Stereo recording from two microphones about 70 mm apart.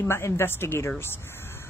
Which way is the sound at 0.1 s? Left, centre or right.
Left.